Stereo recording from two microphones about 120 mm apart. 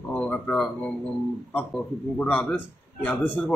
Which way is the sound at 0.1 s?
10° left (ahead or behind).